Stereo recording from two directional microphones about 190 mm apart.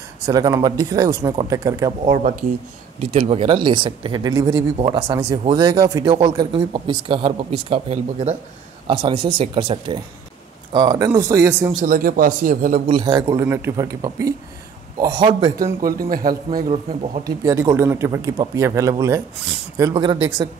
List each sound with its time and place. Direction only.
0.3 s speech: 20° right (ahead or behind)
2.0 s a man's voice: 40° right (ahead or behind); by 11.7 s 15° right (ahead or behind)
11.8 s speech: 50° right (ahead or behind)
12.8 s speech: 25° right (ahead or behind)
15.6 s a man's voice: 50° right (ahead or behind)
17.2 s speech: 15° right (ahead or behind)